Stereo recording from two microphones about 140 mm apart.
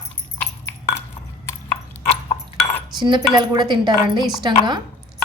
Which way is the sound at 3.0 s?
30° right (ahead or behind).